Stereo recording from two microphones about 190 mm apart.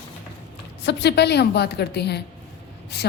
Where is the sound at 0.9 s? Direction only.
60° left (ahead or behind).